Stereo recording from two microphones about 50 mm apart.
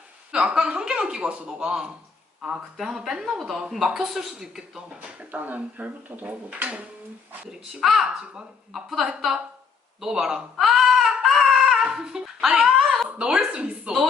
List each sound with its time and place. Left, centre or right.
0.3 s a woman's voice: centre
5.3 s speech: right
7.7 s a woman's voice: centre
10.6 s crying: centre
13.1 s a woman's voice: centre